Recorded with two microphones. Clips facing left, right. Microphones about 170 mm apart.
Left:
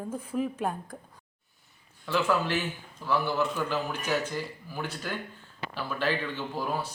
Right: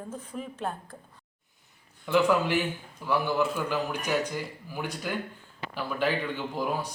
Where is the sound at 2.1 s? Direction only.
15° right (ahead or behind).